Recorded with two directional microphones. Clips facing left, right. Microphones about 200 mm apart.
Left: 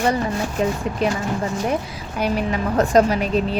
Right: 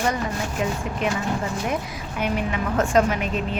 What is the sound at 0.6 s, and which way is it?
Speech, 35° left (ahead or behind).